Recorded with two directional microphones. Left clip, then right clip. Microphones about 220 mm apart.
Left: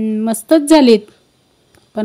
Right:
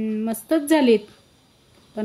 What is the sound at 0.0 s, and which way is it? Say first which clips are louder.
A woman's voice: left 8 dB; 30° left (ahead or behind).